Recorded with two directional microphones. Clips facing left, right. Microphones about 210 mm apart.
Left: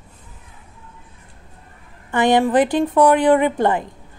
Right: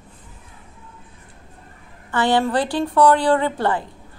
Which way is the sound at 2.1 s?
20° left (ahead or behind).